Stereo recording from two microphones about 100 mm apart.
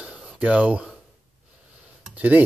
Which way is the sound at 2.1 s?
15° right (ahead or behind).